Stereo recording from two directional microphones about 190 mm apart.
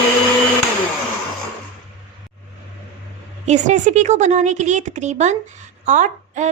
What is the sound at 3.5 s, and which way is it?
Speech, 40° right (ahead or behind).